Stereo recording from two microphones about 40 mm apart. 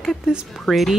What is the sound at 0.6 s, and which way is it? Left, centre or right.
Speech, centre.